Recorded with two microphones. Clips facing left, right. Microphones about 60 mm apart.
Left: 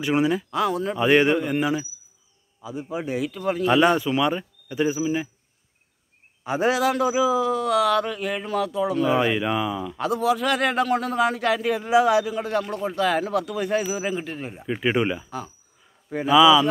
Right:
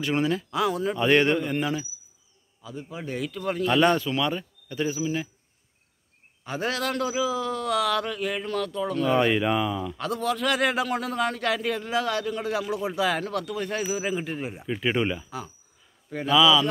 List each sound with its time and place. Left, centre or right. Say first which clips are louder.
0.0 s speech: left 4 dB; centre
0.5 s speech: left 2 dB; centre
3.2 s speech: left 2 dB; centre
6.4 s speech: left 7 dB; centre
11.8 s speech: left 8 dB; centre
14.7 s speech: left 3 dB; centre
16.1 s speech: left 4 dB; centre